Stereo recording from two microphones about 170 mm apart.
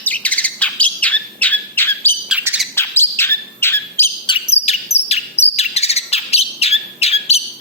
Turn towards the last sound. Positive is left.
turn(degrees=40)  # may be behind; listen again after turning